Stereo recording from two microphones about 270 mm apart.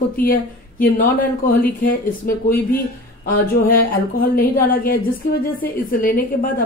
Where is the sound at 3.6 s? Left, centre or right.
Left.